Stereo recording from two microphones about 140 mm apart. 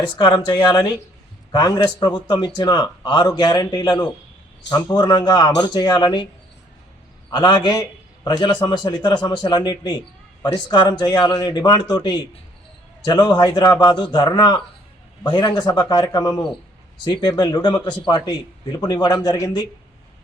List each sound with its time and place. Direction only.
0.0 s a man's voice: 35° left (ahead or behind)
7.3 s a man's voice: 30° left (ahead or behind)